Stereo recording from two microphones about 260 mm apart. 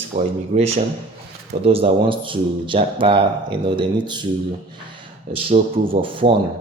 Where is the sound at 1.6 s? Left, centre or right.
Right.